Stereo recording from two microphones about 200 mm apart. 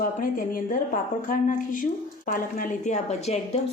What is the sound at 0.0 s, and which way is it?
A woman's voice, 45° left (ahead or behind).